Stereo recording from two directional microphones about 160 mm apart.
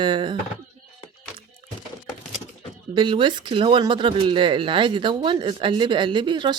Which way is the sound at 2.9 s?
30° right (ahead or behind).